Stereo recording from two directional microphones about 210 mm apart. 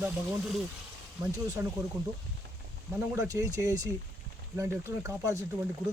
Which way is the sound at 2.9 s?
15° right (ahead or behind).